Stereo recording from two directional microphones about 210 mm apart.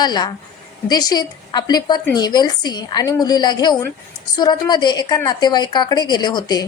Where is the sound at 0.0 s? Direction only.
20° left (ahead or behind).